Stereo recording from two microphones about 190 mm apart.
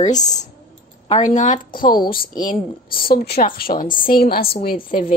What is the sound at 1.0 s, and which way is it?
Speech, 35° left (ahead or behind).